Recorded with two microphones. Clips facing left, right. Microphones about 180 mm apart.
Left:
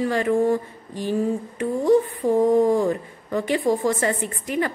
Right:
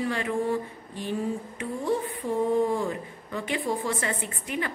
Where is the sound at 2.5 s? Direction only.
45° left (ahead or behind).